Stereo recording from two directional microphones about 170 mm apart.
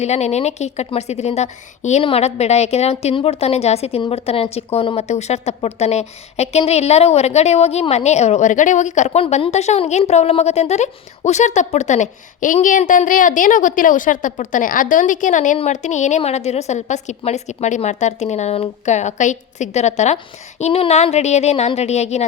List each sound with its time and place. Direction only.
0.0 s a woman's voice: 40° left (ahead or behind)